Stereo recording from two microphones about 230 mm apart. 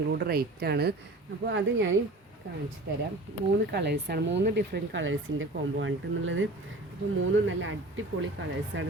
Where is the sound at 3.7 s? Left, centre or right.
Right.